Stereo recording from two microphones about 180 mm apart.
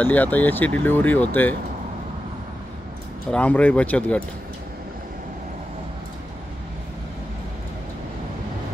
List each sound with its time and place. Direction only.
0.0 s speech: 10° left (ahead or behind)
3.3 s speech: 5° left (ahead or behind)